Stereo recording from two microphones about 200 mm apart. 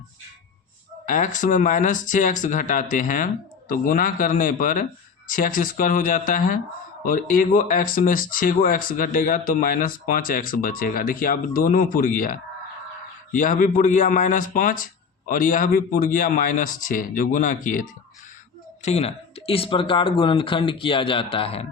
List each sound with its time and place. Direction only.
1.0 s speech: 40° left (ahead or behind)